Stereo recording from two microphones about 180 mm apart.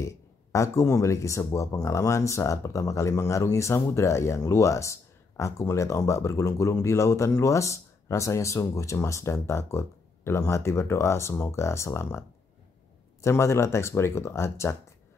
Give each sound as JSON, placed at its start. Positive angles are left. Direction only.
{"t": 0.5, "sound": "speech", "side_deg": 15}